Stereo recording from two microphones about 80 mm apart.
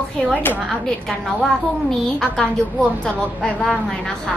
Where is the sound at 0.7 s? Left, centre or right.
Centre.